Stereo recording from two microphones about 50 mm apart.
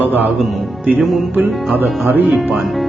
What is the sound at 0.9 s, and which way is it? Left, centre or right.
A man's voice, right.